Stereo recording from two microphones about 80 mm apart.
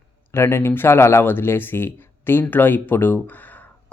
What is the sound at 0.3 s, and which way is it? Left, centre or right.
Speech, left.